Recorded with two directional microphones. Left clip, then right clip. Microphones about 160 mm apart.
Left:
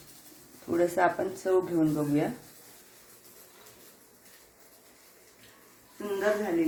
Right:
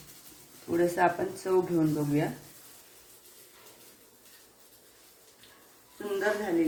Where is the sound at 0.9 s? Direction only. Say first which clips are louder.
Even; 15° left (ahead or behind).